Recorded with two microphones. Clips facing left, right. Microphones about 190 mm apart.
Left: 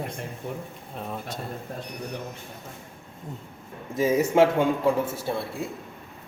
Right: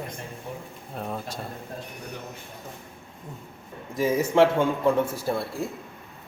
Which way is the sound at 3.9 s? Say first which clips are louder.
Left 1 dB; 20° left (ahead or behind).